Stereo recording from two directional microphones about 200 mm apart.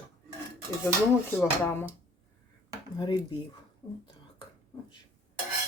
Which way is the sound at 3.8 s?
25° left (ahead or behind).